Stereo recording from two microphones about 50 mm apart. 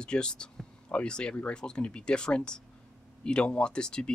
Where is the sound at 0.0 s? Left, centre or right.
Centre.